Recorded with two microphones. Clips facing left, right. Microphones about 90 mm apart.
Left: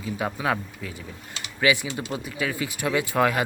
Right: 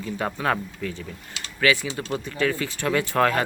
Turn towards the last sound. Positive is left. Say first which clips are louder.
# right 1 dB
turn(degrees=10)  # may be behind; listen again after turning